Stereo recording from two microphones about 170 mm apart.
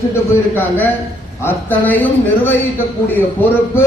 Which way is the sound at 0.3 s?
15° left (ahead or behind).